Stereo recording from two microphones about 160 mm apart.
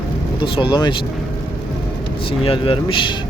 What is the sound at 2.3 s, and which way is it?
Speech, 35° left (ahead or behind).